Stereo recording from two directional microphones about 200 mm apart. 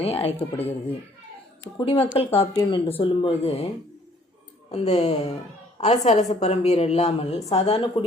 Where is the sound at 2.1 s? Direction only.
30° left (ahead or behind).